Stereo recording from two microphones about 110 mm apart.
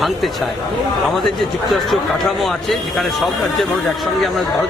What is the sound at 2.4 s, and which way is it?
Speech, centre (ahead or behind).